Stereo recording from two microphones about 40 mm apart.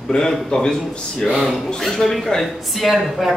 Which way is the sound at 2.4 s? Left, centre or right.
Centre.